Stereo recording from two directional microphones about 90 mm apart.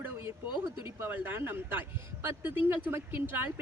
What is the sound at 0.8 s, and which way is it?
A woman's voice, 25° right (ahead or behind).